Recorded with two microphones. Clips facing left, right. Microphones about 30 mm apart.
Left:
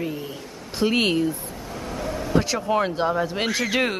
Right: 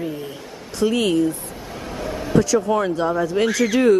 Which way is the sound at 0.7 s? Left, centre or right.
Left.